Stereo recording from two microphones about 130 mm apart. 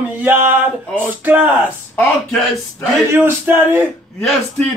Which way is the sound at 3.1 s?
15° right (ahead or behind).